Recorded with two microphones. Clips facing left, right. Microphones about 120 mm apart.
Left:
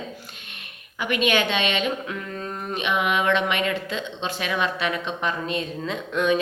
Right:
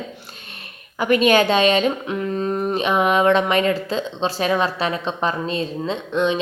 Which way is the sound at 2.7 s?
35° right (ahead or behind).